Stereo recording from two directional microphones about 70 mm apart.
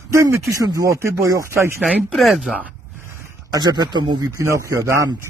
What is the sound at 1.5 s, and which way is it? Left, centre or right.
Speech, right.